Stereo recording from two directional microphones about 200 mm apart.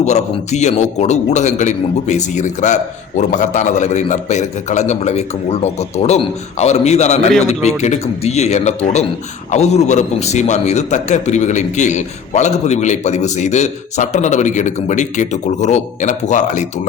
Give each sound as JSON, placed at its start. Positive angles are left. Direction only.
{"t": 0.0, "sound": "a man's voice", "side_deg": 35}